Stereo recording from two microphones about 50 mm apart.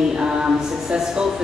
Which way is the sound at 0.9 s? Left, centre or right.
Centre.